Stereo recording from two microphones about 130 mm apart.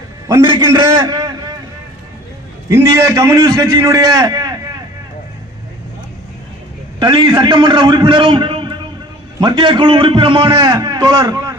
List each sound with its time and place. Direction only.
0.6 s a man's voice: 25° right (ahead or behind)
2.9 s a man's voice: 30° right (ahead or behind)
7.0 s a man's voice: 35° right (ahead or behind)